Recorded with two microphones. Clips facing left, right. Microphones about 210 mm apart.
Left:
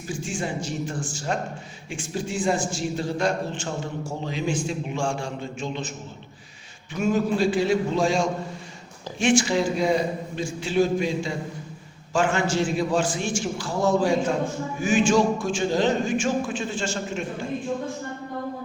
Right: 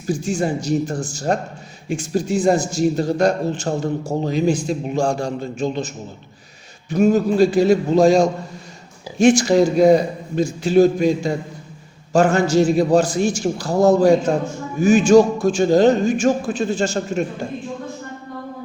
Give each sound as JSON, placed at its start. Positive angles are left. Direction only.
{"t": 0.1, "sound": "a man's voice", "side_deg": -40}
{"t": 6.9, "sound": "a man's voice", "side_deg": -40}